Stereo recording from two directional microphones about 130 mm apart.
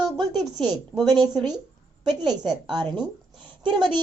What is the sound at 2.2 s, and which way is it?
Speech, 35° right (ahead or behind).